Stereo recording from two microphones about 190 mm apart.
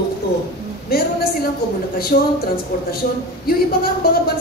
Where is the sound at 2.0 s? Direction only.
55° left (ahead or behind).